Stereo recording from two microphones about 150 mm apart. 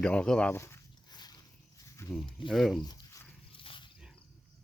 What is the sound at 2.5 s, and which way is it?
Speech, centre (ahead or behind).